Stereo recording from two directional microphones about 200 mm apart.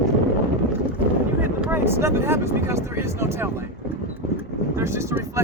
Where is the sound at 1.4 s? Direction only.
10° right (ahead or behind).